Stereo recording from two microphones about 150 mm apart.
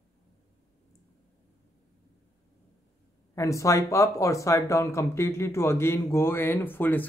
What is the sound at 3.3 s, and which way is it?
Speech, 20° left (ahead or behind).